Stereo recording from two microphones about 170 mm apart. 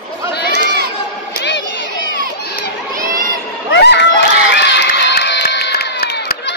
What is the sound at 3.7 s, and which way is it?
Crowd, 90° left.